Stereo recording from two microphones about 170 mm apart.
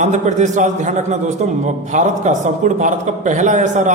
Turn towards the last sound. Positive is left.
turn(degrees=-45)  # may be behind; listen again after turning